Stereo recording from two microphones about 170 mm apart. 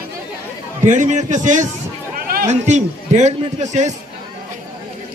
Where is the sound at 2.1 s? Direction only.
60° right (ahead or behind).